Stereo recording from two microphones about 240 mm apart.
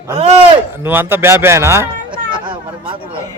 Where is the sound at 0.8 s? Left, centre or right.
Centre.